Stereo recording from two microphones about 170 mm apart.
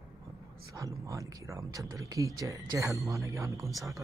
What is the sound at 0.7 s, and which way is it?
Speech, 20° right (ahead or behind).